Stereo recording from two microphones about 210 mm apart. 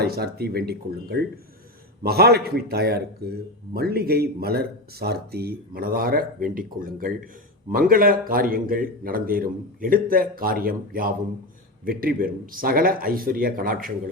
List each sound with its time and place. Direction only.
0.0 s a man's voice: 50° right (ahead or behind)